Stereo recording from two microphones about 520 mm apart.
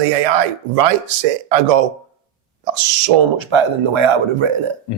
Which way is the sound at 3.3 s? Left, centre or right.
Right.